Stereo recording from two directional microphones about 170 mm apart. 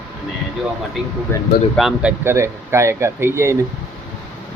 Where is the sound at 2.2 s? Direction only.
15° right (ahead or behind).